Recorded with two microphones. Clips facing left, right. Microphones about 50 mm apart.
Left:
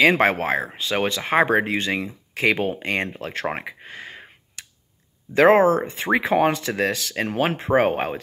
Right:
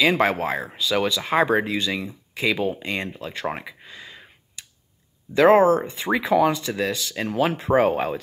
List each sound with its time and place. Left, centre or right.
0.0 s speech: left
3.4 s a sound: left
5.3 s speech: left